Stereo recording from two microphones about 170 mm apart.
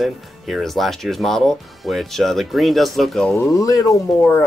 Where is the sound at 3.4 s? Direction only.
20° left (ahead or behind).